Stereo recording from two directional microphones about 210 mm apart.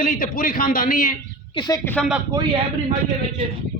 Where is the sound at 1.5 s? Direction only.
20° left (ahead or behind).